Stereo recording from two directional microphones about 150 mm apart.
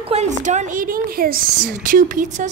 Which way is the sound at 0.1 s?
50° right (ahead or behind).